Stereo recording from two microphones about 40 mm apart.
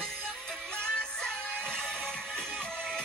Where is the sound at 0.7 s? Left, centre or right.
Left.